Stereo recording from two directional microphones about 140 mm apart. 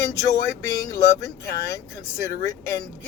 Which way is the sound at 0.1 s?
25° left (ahead or behind).